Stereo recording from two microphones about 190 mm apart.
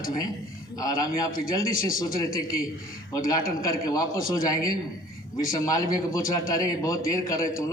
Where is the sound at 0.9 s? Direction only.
20° left (ahead or behind).